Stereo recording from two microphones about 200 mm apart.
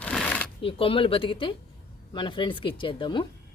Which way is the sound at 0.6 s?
25° left (ahead or behind).